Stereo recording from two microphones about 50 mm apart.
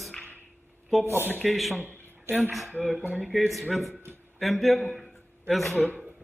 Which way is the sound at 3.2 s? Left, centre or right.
Centre.